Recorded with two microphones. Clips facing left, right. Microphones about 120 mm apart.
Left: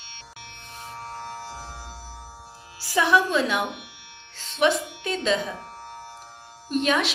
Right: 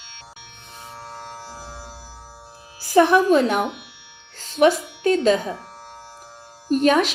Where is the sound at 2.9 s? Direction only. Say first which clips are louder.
Right 6 dB; 50° right (ahead or behind).